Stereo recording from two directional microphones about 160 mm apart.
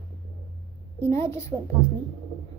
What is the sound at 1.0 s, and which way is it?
Speech, 15° left (ahead or behind).